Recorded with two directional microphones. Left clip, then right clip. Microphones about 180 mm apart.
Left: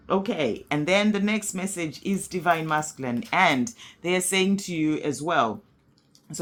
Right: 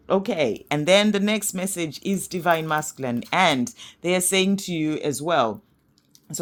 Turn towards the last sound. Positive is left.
turn(degrees=-40)  # may be behind; listen again after turning